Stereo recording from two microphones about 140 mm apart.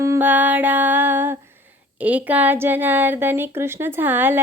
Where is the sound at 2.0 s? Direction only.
10° right (ahead or behind).